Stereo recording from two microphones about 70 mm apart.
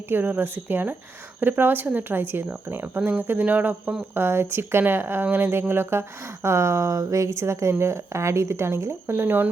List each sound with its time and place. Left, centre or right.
0.1 s speech: right
4.1 s speech: right